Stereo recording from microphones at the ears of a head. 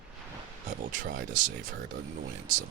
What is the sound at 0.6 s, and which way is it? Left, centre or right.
Speech, right.